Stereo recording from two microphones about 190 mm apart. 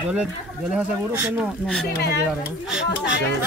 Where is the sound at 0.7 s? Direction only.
10° right (ahead or behind).